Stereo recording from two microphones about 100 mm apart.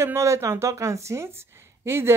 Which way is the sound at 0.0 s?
25° right (ahead or behind).